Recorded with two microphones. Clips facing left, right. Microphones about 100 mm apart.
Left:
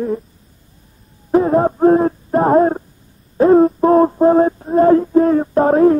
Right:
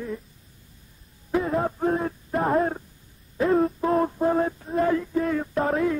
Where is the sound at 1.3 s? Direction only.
40° left (ahead or behind).